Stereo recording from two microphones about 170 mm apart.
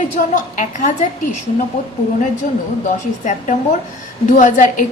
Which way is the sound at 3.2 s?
45° left (ahead or behind).